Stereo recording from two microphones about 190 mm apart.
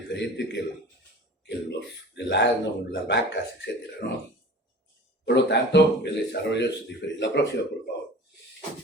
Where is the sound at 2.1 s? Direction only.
65° left (ahead or behind).